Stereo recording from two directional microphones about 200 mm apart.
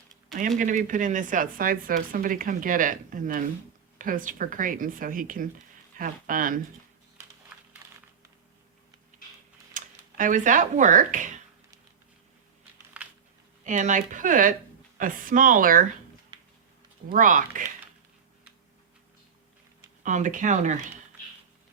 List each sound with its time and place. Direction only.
0.6 s speech: 40° right (ahead or behind)
7.5 s crumpling: 5° right (ahead or behind)
9.7 s speech: 40° right (ahead or behind)
12.9 s a sound: 5° right (ahead or behind)
13.7 s speech: 40° right (ahead or behind)
16.3 s a sound: 25° right (ahead or behind)
17.1 s speech: 40° right (ahead or behind)
20.0 s speech: 40° right (ahead or behind)